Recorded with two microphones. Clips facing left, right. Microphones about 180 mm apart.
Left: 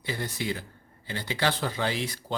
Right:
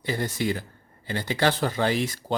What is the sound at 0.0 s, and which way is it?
Speech, 45° right (ahead or behind).